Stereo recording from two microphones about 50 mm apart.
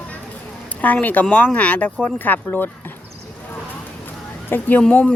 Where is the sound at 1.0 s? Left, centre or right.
Left.